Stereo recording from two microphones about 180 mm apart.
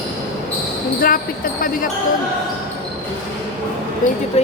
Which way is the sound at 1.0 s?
50° left (ahead or behind).